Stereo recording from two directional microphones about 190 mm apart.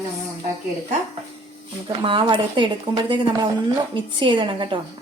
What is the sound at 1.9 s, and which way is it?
Speech, 25° right (ahead or behind).